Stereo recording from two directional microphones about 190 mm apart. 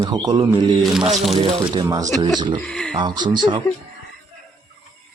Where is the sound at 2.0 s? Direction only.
40° right (ahead or behind).